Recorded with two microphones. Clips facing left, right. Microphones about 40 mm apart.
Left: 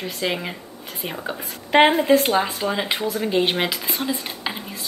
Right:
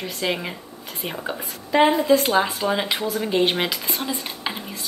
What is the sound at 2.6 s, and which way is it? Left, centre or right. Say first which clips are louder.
Speech: even; centre.